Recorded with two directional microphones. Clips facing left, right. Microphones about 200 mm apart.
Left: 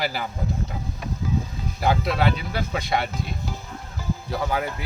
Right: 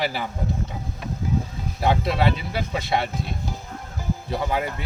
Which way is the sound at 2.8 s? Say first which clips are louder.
Right 1 dB; 25° right (ahead or behind).